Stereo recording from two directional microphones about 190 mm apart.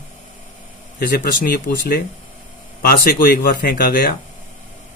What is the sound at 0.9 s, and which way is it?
Speech, 55° left (ahead or behind).